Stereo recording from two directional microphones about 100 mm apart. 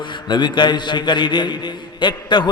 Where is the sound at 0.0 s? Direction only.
50° left (ahead or behind).